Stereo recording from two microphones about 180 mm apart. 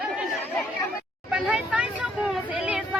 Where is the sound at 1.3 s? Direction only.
5° right (ahead or behind).